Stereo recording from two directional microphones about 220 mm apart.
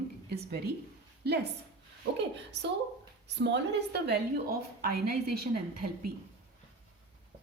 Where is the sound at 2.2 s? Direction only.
50° right (ahead or behind).